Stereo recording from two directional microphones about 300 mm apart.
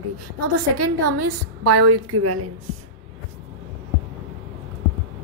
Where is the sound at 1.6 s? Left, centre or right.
Right.